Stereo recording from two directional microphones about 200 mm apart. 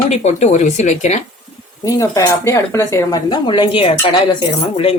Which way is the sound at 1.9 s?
15° left (ahead or behind).